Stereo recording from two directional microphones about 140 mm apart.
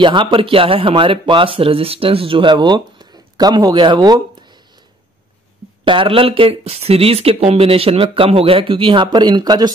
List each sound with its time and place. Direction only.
0.0 s speech: 35° right (ahead or behind)
5.9 s speech: 40° right (ahead or behind)